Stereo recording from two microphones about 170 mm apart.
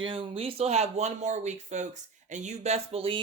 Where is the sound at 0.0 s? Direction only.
30° right (ahead or behind).